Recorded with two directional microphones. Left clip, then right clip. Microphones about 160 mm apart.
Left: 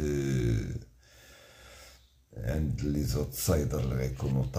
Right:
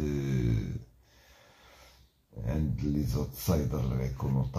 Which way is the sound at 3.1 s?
20° left (ahead or behind).